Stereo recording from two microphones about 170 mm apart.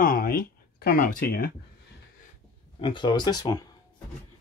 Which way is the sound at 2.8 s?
30° left (ahead or behind).